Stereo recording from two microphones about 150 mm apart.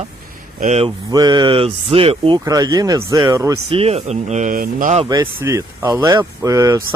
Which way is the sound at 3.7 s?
40° right (ahead or behind).